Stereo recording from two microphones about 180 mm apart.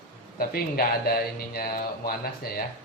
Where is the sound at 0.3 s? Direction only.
55° left (ahead or behind).